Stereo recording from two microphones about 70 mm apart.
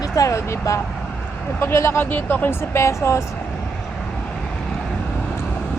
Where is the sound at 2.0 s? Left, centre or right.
Left.